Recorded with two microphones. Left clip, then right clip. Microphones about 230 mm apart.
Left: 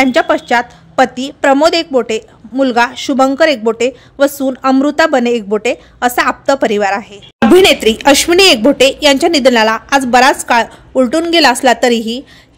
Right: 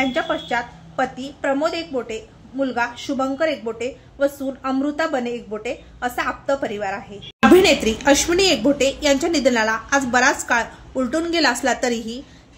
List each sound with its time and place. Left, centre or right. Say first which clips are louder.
0.0 s a woman's voice: left 11 dB; left
7.6 s a woman's voice: left 8 dB; left